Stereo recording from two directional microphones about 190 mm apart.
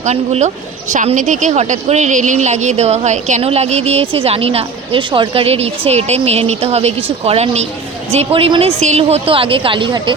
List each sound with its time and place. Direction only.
0.0 s a woman's voice: 35° right (ahead or behind)